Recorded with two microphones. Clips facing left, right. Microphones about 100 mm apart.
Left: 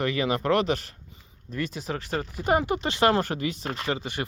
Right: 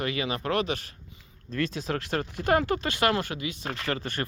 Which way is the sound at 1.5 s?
5° left (ahead or behind).